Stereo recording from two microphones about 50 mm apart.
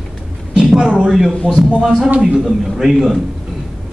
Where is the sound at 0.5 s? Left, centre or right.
Centre.